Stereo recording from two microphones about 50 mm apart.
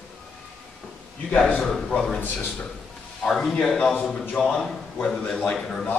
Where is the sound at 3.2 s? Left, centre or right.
Centre.